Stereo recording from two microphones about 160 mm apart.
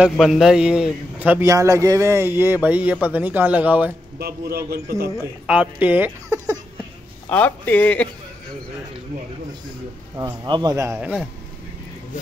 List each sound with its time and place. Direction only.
0.0 s a man's voice: centre (ahead or behind)
4.2 s a man's voice: 75° right (ahead or behind)
5.5 s speech: 10° right (ahead or behind)
7.2 s a man's voice: 10° left (ahead or behind)
10.1 s speech: 25° right (ahead or behind); by 11.2 s 10° right (ahead or behind)